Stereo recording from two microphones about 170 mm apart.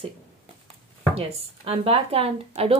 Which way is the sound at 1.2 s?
35° right (ahead or behind).